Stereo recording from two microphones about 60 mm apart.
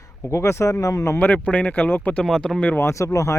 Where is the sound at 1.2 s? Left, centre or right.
Left.